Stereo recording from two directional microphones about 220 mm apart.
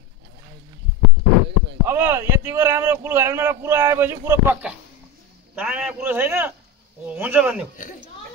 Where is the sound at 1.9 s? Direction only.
10° right (ahead or behind).